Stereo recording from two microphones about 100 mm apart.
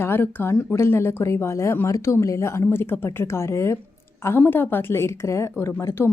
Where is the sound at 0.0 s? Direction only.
20° left (ahead or behind).